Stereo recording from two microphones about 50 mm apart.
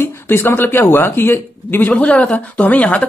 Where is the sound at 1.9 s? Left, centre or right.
Left.